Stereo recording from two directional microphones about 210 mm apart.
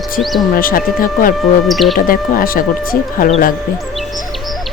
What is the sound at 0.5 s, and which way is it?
Speech, 45° left (ahead or behind).